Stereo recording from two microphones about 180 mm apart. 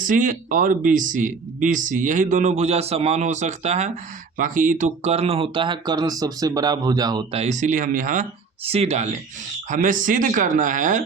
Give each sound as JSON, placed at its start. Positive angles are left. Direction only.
{"t": 0.0, "sound": "speech", "side_deg": -45}
{"t": 7.3, "sound": "speech", "side_deg": -40}
{"t": 9.6, "sound": "speech", "side_deg": -45}